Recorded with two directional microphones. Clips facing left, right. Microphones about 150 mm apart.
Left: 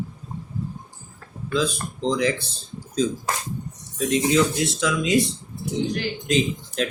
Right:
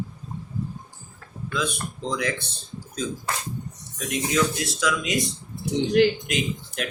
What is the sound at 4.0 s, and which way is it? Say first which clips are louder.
Speech: left 5 dB; 25° left (ahead or behind).